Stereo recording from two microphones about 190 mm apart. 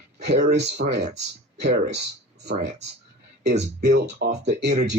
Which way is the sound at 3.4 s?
40° right (ahead or behind).